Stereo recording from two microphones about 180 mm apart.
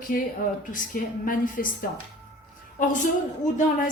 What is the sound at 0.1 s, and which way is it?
A woman's voice, 55° left (ahead or behind).